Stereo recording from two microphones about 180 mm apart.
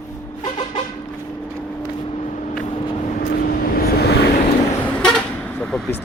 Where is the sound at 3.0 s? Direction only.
45° left (ahead or behind); by 4.3 s 65° left (ahead or behind).